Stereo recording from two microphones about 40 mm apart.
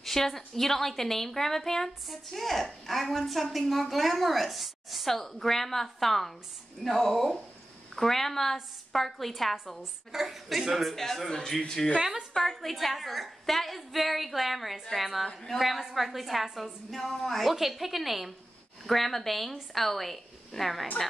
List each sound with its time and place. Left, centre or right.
0.0 s a woman's voice: centre